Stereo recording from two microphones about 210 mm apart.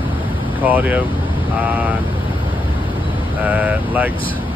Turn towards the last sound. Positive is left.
turn(degrees=-10)  # may be behind; listen again after turning